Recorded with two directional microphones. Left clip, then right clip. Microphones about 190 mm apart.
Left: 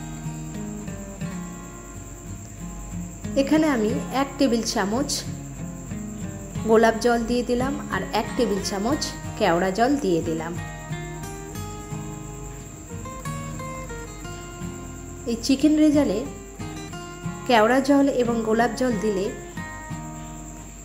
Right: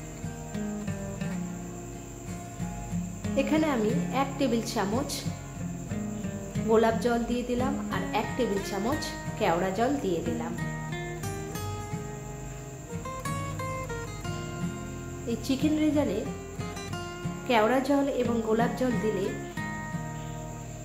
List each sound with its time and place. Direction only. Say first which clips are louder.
3.3 s a woman's voice: left 6 dB; 25° left (ahead or behind)
6.7 s a woman's voice: left 6 dB; 30° left (ahead or behind)
13.2 s music: even; centre (ahead or behind)
15.2 s a woman's voice: left 8 dB; 30° left (ahead or behind)
17.5 s a woman's voice: left 6 dB; 30° left (ahead or behind)
19.0 s speech: left 4 dB; 5° right (ahead or behind)